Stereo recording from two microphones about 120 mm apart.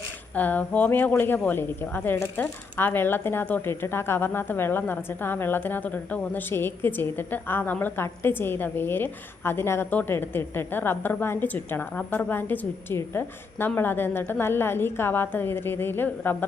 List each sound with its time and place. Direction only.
0.3 s speech: 15° left (ahead or behind)